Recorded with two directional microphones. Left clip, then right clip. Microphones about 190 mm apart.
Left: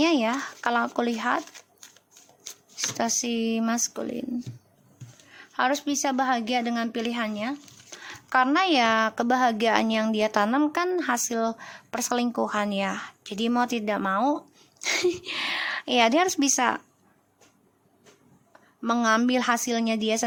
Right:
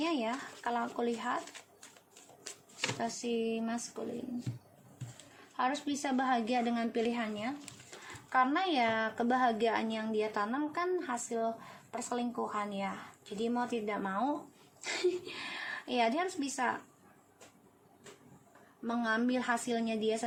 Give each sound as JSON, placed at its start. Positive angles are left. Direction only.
{"t": 0.0, "sound": "a woman's voice", "side_deg": 45}
{"t": 3.0, "sound": "a woman's voice", "side_deg": 45}
{"t": 5.5, "sound": "a woman's voice", "side_deg": 40}
{"t": 18.8, "sound": "a woman's voice", "side_deg": 45}